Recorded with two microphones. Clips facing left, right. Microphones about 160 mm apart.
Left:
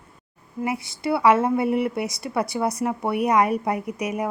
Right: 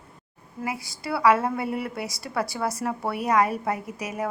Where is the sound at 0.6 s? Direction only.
25° left (ahead or behind).